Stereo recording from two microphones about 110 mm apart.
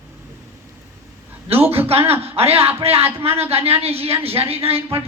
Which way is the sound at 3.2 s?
65° right (ahead or behind).